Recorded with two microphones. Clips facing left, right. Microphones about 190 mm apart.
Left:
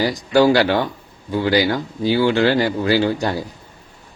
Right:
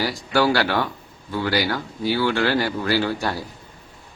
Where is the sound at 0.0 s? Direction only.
15° left (ahead or behind).